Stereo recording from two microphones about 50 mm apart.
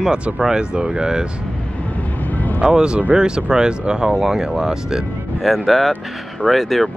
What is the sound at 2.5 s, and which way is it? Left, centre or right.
Speech, centre.